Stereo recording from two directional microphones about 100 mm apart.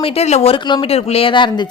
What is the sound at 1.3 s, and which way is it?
Speech, 55° left (ahead or behind).